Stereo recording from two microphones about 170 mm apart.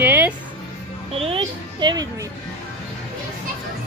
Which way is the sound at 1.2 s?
30° right (ahead or behind).